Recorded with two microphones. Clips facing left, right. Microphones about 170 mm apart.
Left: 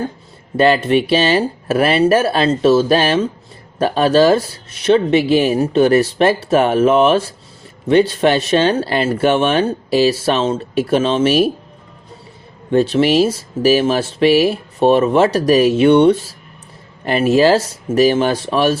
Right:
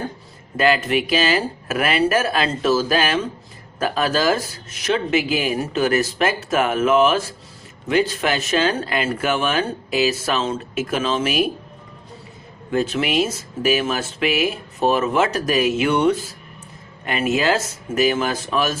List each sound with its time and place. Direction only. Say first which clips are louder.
0.5 s speech: left 6 dB; 30° left (ahead or behind)
12.7 s speech: left 7 dB; 30° left (ahead or behind)